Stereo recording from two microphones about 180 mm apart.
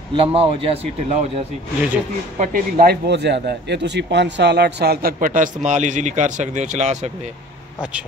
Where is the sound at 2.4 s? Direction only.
50° right (ahead or behind).